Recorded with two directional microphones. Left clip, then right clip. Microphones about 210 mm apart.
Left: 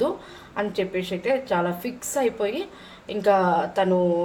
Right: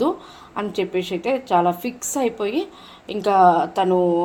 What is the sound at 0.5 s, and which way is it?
Speech, 40° right (ahead or behind).